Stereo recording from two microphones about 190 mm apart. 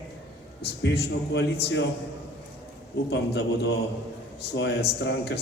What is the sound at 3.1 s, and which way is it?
Speech, 60° left (ahead or behind).